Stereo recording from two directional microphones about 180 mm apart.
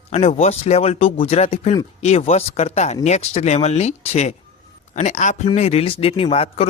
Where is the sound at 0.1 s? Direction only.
35° left (ahead or behind).